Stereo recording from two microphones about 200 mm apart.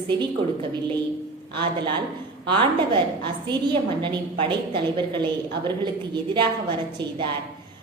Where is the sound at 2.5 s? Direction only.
25° right (ahead or behind).